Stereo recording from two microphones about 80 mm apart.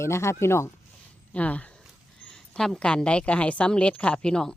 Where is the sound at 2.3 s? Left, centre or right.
Centre.